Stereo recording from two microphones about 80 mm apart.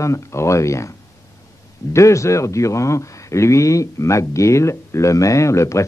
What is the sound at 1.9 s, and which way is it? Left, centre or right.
Speech, left.